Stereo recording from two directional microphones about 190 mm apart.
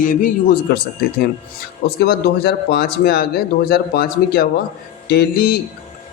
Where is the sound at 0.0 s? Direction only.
45° left (ahead or behind).